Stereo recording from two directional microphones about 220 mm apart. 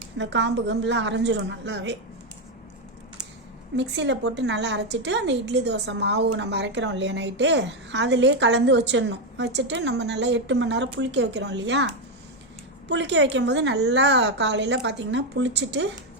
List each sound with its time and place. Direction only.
0.2 s a woman's voice: 55° right (ahead or behind)
3.8 s a woman's voice: 55° right (ahead or behind)
12.9 s a woman's voice: 55° right (ahead or behind)